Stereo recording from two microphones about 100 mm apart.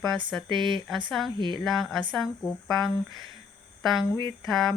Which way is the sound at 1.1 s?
Centre (ahead or behind).